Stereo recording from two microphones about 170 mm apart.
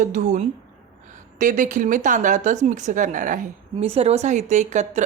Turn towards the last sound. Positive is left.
turn(degrees=-45)  # may be behind; listen again after turning